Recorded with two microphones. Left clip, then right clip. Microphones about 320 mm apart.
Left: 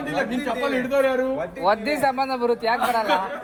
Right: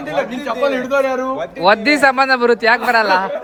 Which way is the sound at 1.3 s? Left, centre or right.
Right.